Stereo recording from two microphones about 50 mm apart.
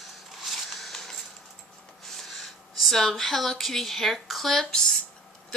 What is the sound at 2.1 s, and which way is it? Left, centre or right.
Speech, centre.